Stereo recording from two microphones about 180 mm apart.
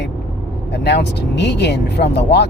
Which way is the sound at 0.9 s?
70° left (ahead or behind).